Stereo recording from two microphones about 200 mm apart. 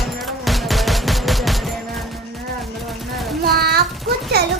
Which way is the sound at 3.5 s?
50° right (ahead or behind).